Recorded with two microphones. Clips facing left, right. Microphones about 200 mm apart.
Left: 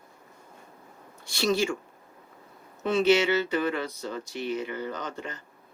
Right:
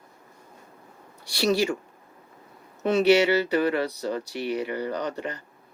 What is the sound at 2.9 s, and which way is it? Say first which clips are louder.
Speech: right 3 dB; 40° right (ahead or behind).